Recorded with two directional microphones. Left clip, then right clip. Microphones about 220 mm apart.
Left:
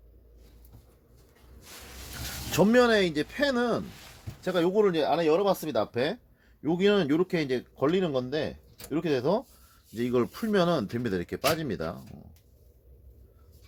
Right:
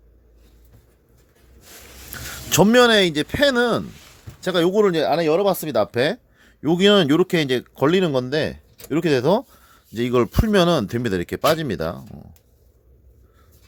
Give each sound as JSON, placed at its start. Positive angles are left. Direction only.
{"t": 2.5, "sound": "speech", "side_deg": -40}